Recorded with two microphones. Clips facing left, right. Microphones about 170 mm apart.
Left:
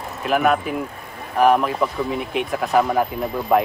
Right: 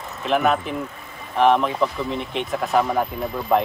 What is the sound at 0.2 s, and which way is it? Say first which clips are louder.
Speech: left 1 dB; 5° left (ahead or behind).